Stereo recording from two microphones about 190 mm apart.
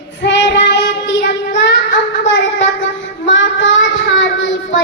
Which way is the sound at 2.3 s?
75° left (ahead or behind).